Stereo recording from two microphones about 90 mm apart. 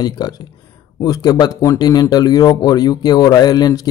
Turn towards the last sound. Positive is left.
turn(degrees=45)  # may be behind; listen again after turning